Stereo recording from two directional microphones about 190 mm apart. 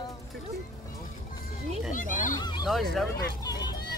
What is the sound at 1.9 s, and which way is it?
Speech, 45° left (ahead or behind).